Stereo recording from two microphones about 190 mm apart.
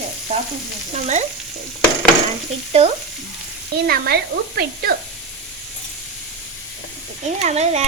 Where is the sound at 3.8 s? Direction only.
55° right (ahead or behind).